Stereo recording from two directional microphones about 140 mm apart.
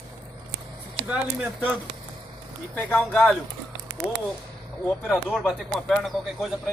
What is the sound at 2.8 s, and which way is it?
Speech, 5° left (ahead or behind).